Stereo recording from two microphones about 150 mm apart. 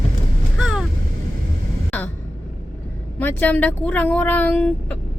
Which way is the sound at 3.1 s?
10° left (ahead or behind).